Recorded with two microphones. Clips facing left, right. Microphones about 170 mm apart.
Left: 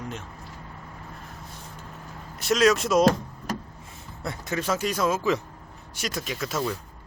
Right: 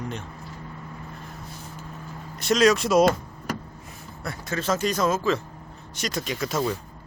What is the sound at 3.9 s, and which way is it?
Speech, 20° left (ahead or behind).